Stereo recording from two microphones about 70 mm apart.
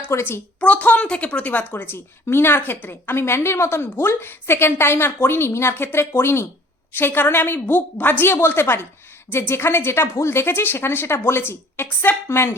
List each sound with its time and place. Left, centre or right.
0.1 s a woman's voice: left
0.6 s a woman's voice: centre; by 12.5 s left